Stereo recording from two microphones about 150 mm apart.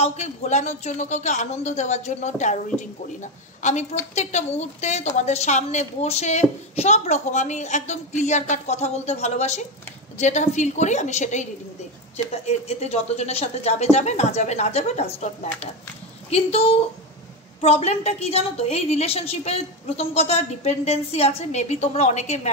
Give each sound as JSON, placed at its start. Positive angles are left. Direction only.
{"t": 0.0, "sound": "a woman's voice", "side_deg": 45}
{"t": 16.3, "sound": "a woman's voice", "side_deg": 40}